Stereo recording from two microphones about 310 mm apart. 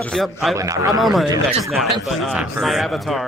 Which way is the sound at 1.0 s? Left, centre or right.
Centre.